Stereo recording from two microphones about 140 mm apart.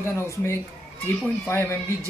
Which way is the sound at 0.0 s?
20° left (ahead or behind).